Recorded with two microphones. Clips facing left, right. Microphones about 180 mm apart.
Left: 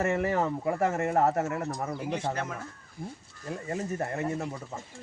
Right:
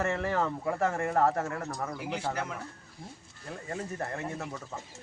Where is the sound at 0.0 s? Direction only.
20° left (ahead or behind).